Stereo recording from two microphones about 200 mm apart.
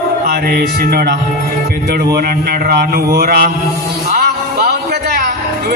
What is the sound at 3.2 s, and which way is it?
Speech, 50° right (ahead or behind).